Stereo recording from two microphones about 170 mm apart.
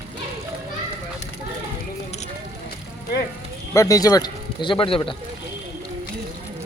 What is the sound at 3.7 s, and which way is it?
Speech, 20° left (ahead or behind).